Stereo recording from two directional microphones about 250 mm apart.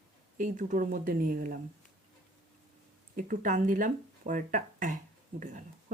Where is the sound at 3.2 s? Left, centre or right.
Right.